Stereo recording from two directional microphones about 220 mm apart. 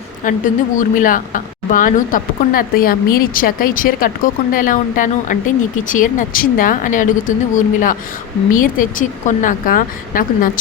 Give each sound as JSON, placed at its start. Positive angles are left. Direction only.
{"t": 0.3, "sound": "speech", "side_deg": 35}